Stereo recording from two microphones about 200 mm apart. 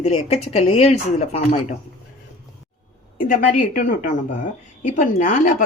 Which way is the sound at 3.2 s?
40° left (ahead or behind).